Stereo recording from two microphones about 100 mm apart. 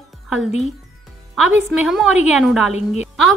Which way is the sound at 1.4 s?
5° right (ahead or behind).